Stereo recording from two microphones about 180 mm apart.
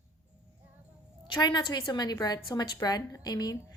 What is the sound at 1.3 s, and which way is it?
A woman's voice, 25° left (ahead or behind).